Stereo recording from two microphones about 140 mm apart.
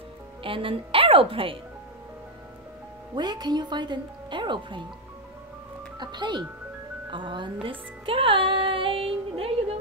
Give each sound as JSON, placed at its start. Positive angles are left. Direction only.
{"t": 0.4, "sound": "a woman's voice", "side_deg": -40}
{"t": 3.2, "sound": "speech", "side_deg": -30}
{"t": 5.9, "sound": "speech", "side_deg": -30}
{"t": 7.6, "sound": "music", "side_deg": -40}